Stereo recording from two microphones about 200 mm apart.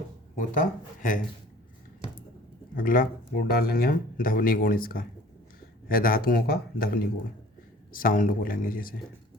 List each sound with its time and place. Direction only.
0.3 s speech: 40° left (ahead or behind)
2.7 s speech: 45° left (ahead or behind)